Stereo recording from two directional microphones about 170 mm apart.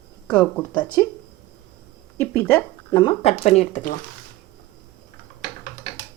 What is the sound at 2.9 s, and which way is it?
Speech, 30° left (ahead or behind).